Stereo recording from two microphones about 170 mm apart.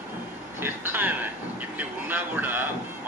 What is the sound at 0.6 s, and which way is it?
Speech, 10° right (ahead or behind).